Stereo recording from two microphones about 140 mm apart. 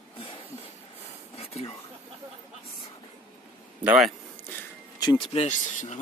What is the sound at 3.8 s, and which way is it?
Speech, 10° right (ahead or behind).